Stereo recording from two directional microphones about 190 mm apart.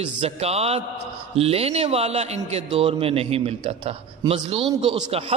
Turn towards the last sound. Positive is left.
turn(degrees=-30)  # may be behind; listen again after turning